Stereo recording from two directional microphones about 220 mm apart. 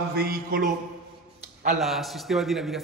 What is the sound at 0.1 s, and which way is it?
Speech, 45° right (ahead or behind).